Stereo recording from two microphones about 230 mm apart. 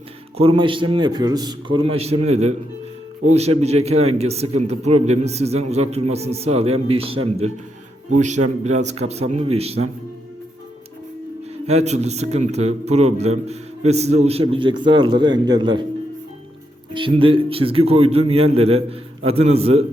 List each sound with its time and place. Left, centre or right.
0.3 s a man's voice: right
11.6 s a man's voice: right
16.9 s a man's voice: right